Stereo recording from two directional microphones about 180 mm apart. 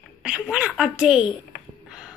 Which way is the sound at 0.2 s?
5° right (ahead or behind).